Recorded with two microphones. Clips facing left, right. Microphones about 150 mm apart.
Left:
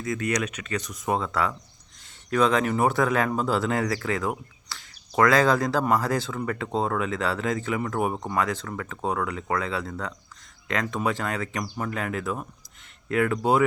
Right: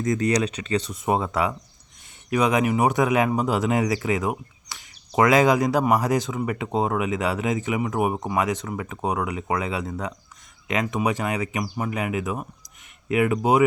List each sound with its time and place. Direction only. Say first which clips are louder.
0.0 s speech: right 5 dB; 35° right (ahead or behind); by 13.7 s 15° right (ahead or behind)